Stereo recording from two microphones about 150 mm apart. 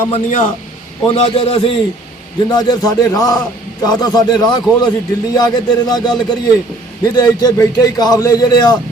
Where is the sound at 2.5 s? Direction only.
25° left (ahead or behind).